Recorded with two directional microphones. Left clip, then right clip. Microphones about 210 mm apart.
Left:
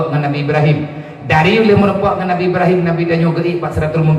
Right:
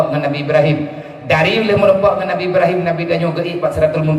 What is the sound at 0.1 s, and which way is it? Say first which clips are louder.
A man's voice: right 1 dB; 50° right (ahead or behind).